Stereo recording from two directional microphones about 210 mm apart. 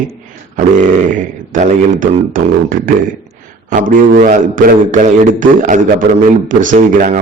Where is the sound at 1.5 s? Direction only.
40° right (ahead or behind).